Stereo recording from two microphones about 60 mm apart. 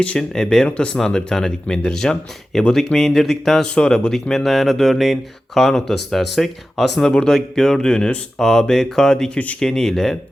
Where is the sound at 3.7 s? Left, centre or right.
Centre.